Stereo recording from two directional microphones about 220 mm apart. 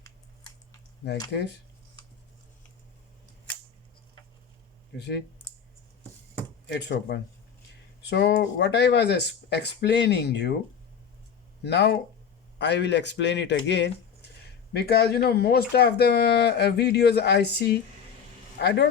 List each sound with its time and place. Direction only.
1.3 s speech: 50° left (ahead or behind)
4.9 s speech: 50° left (ahead or behind)
6.7 s speech: 50° left (ahead or behind)
11.6 s speech: 50° left (ahead or behind)